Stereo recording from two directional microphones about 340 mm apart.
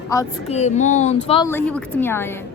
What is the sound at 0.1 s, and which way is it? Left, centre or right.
Speech, centre.